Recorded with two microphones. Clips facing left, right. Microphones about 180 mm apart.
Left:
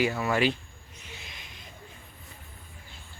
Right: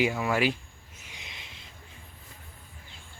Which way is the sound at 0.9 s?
15° right (ahead or behind).